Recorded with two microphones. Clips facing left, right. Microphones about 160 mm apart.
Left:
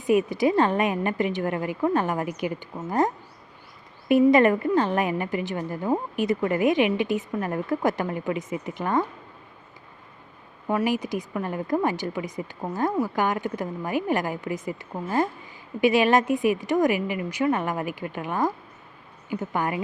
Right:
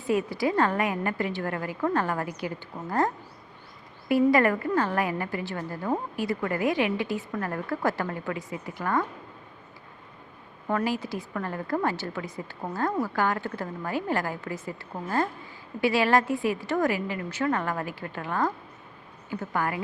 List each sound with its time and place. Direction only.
0.0 s a woman's voice: 15° left (ahead or behind)
4.1 s a woman's voice: 20° left (ahead or behind)
10.7 s a woman's voice: 15° left (ahead or behind)